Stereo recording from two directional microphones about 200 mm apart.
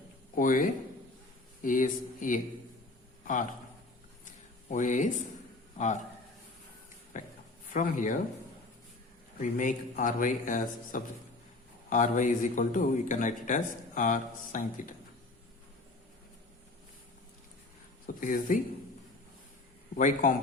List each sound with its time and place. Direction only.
0.3 s a man's voice: 40° left (ahead or behind)
4.7 s a man's voice: 40° left (ahead or behind)
7.1 s a sound: 40° left (ahead or behind)
7.7 s speech: 40° left (ahead or behind)
9.4 s speech: 40° left (ahead or behind)
18.0 s speech: 45° left (ahead or behind)
20.0 s speech: 40° left (ahead or behind)